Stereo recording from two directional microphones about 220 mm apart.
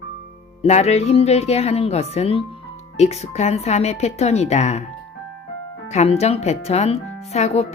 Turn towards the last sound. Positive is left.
turn(degrees=30)  # may be behind; listen again after turning